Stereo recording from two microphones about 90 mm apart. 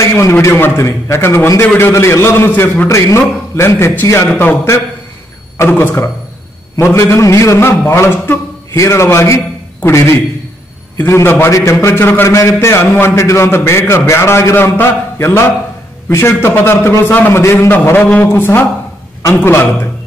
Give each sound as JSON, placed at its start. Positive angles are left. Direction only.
{"t": 0.2, "sound": "a man's voice", "side_deg": 30}